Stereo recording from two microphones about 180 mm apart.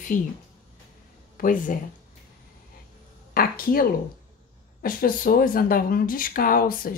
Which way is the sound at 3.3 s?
55° left (ahead or behind).